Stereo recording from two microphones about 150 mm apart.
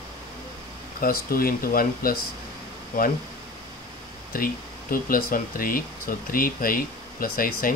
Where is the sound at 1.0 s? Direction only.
75° left (ahead or behind).